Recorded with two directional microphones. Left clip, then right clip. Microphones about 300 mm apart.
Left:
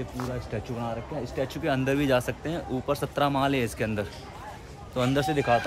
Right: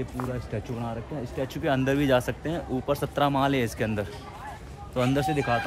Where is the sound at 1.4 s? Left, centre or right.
Centre.